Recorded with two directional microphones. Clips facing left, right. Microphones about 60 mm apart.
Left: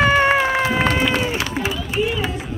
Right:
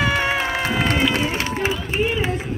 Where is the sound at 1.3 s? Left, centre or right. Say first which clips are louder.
Even; right.